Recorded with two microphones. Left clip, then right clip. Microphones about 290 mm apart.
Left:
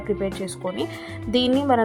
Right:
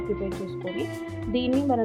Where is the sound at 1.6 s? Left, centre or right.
Centre.